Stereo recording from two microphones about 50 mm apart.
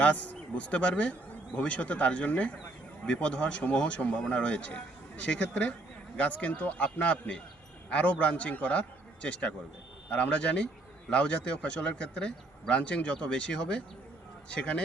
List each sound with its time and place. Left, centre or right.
0.0 s a man's voice: left